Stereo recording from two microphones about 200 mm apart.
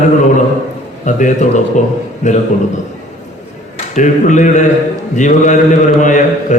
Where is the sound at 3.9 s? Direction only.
40° left (ahead or behind).